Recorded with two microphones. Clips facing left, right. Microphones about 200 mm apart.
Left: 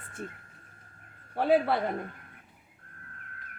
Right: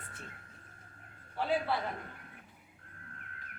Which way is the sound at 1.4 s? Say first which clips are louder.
Left 8 dB; 55° left (ahead or behind).